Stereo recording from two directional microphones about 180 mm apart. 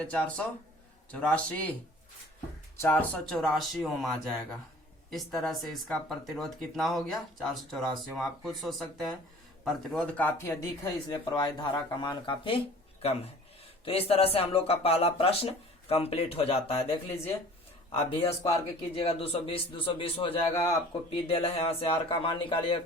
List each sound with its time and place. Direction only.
0.0 s speech: 5° left (ahead or behind)
2.7 s speech: 10° left (ahead or behind)
11.1 s speech: 25° left (ahead or behind)
18.3 s speech: 15° left (ahead or behind)
18.9 s speech: 30° left (ahead or behind)
20.5 s speech: 15° left (ahead or behind)
21.1 s speech: 30° left (ahead or behind)